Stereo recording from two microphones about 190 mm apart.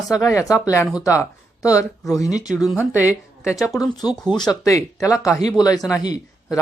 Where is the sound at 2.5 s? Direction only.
5° right (ahead or behind).